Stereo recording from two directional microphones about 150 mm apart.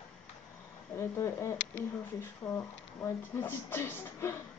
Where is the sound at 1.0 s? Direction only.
15° left (ahead or behind).